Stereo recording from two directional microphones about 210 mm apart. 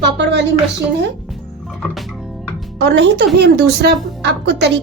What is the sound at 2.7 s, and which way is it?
A woman's voice, 55° right (ahead or behind).